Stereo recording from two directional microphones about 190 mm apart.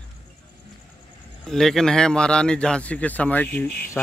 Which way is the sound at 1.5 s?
Centre (ahead or behind).